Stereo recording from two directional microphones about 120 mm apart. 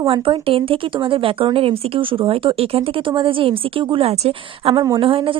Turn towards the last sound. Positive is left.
turn(degrees=-45)  # may be behind; listen again after turning